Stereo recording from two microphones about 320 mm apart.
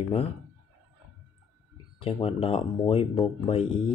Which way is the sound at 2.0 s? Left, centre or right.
Centre.